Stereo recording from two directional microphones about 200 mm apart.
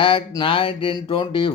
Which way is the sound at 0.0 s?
25° left (ahead or behind).